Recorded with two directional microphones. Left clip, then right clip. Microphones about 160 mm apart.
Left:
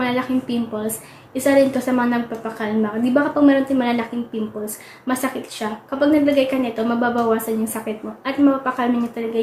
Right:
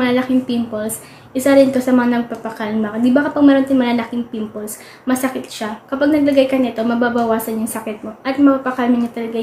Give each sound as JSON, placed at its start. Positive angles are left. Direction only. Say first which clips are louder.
{"t": 0.0, "sound": "a woman's voice", "louder": "right 5 dB", "side_deg": -15}
{"t": 5.0, "sound": "a woman's voice", "louder": "right 4 dB", "side_deg": -15}